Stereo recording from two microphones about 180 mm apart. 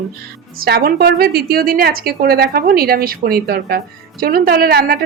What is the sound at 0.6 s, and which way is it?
A woman's voice, 60° right (ahead or behind).